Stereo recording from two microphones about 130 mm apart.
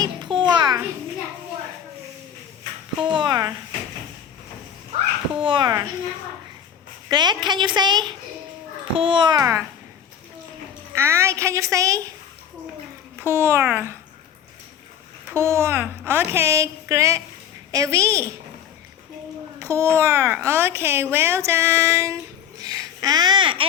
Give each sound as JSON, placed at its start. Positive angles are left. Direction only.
{"t": 0.0, "sound": "babbling", "side_deg": -35}
{"t": 3.0, "sound": "a sound", "side_deg": -40}
{"t": 5.4, "sound": "a woman's voice", "side_deg": -40}
{"t": 7.1, "sound": "a woman's voice", "side_deg": -35}
{"t": 9.4, "sound": "a child's voice", "side_deg": -20}
{"t": 10.9, "sound": "a child's voice", "side_deg": -20}
{"t": 13.1, "sound": "a child's voice", "side_deg": -20}
{"t": 15.3, "sound": "a child's voice", "side_deg": -20}
{"t": 19.5, "sound": "a child's voice", "side_deg": -20}